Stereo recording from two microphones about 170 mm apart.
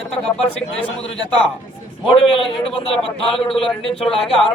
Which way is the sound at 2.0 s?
30° left (ahead or behind).